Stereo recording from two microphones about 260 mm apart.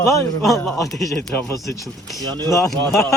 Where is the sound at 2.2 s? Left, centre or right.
Centre.